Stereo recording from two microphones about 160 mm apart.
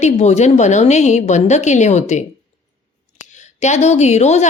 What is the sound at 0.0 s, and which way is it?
A woman's voice, 45° left (ahead or behind).